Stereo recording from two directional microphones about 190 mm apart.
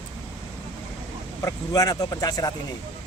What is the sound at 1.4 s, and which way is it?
Speech, 20° left (ahead or behind).